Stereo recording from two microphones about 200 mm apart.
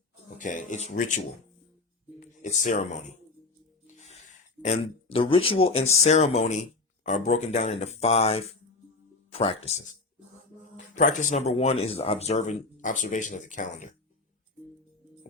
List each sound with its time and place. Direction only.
0.3 s speech: 40° left (ahead or behind)
2.2 s speech: 40° left (ahead or behind)